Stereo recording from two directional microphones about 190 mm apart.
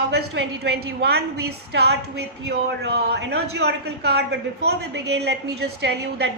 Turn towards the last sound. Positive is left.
turn(degrees=-65)  # may be behind; listen again after turning